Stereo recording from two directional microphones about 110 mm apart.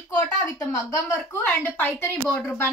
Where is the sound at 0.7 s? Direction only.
20° left (ahead or behind).